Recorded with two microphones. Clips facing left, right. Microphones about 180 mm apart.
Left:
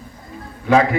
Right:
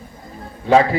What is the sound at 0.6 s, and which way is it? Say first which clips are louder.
Speech: right 1 dB; 30° right (ahead or behind).